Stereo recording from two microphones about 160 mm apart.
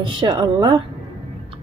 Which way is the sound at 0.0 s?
30° right (ahead or behind).